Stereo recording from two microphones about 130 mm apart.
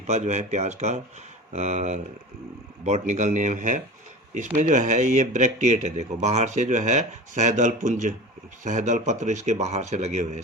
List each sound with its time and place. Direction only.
0.1 s speech: 60° right (ahead or behind)